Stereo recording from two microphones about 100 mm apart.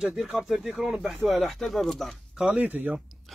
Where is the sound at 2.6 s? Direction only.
15° right (ahead or behind).